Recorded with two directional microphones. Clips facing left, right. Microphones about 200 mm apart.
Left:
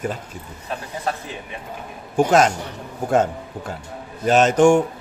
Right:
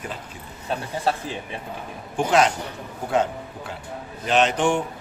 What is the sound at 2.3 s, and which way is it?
A man's voice, 45° left (ahead or behind).